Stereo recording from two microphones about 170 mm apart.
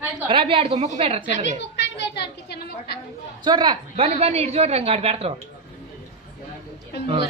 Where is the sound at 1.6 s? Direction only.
90° left.